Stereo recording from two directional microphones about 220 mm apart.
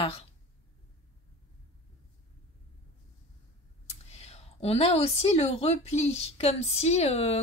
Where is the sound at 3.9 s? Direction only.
30° left (ahead or behind).